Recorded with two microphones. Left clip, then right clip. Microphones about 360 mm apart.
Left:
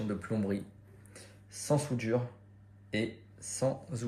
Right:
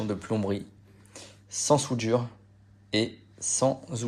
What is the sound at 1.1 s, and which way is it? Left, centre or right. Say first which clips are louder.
Gasp: right 11 dB; centre.